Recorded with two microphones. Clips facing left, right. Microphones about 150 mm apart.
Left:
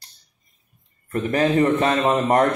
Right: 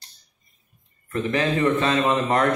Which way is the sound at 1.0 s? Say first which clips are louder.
Left 3 dB; 40° left (ahead or behind).